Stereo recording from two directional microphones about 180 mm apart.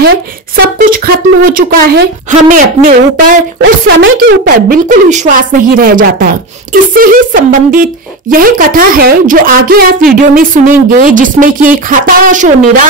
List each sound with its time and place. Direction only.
0.6 s speech: 55° right (ahead or behind)
3.6 s speech: 75° right (ahead or behind); by 12.8 s 45° right (ahead or behind)